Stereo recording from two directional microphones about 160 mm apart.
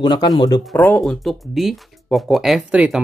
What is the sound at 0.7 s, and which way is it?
Speech, 10° left (ahead or behind).